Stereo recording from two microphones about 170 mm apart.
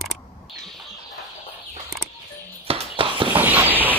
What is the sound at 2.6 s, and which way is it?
Horse, 30° right (ahead or behind).